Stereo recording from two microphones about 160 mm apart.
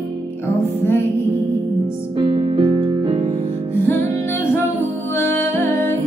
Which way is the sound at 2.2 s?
30° right (ahead or behind).